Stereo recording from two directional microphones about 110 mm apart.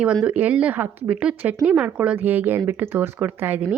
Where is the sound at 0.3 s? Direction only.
10° right (ahead or behind).